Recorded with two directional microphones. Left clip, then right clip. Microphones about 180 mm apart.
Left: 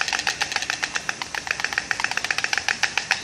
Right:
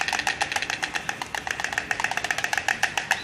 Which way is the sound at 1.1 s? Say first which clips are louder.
Left 2 dB; 35° right (ahead or behind).